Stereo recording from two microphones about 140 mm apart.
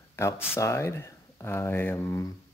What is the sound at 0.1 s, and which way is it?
Speech, 20° left (ahead or behind).